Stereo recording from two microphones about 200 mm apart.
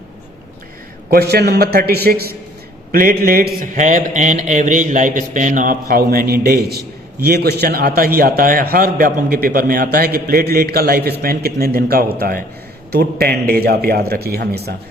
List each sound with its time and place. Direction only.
1.1 s a man's voice: 50° right (ahead or behind)